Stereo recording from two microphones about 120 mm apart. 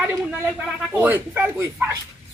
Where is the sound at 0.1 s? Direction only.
15° right (ahead or behind).